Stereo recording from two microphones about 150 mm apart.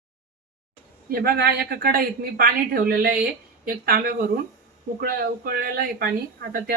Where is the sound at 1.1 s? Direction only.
80° right.